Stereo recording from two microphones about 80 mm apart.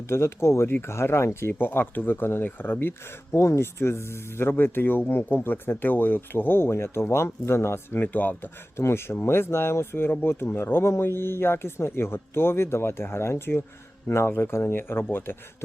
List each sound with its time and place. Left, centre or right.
0.1 s speech: left